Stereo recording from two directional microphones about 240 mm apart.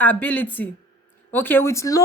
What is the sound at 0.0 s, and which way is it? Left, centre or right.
Speech, centre.